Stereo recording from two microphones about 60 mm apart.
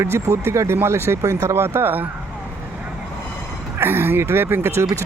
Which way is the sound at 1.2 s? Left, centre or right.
Right.